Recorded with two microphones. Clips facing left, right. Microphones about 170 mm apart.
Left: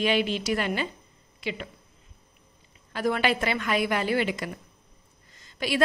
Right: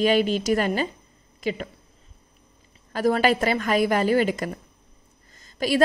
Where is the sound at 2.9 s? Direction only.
40° right (ahead or behind).